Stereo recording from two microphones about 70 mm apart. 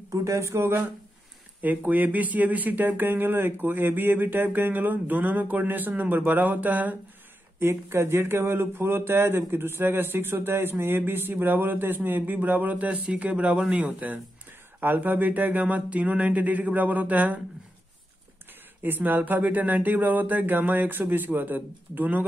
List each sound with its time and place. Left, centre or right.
0.1 s speech: right
1.6 s speech: right
7.6 s speech: right
18.8 s speech: right